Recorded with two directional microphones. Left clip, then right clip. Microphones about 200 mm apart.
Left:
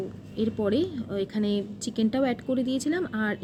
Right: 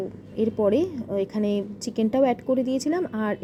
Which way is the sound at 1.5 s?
25° right (ahead or behind).